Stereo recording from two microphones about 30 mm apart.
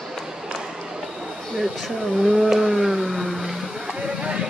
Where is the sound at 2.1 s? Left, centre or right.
Centre.